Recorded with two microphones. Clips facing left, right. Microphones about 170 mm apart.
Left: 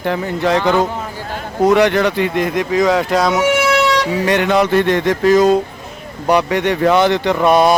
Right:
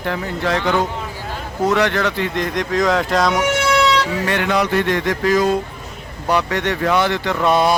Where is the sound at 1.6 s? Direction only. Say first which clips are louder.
Left 5 dB; 15° left (ahead or behind).